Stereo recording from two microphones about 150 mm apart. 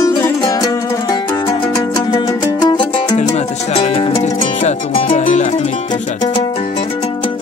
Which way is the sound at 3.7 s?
40° left (ahead or behind).